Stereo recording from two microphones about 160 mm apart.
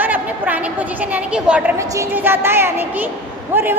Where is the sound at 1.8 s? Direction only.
20° right (ahead or behind).